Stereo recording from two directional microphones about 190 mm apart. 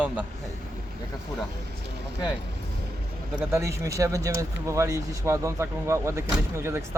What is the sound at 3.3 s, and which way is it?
Speech, 15° right (ahead or behind).